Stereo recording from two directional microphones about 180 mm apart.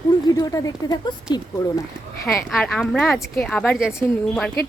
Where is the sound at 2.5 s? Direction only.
5° left (ahead or behind).